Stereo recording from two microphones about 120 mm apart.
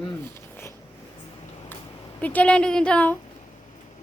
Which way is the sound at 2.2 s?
10° left (ahead or behind).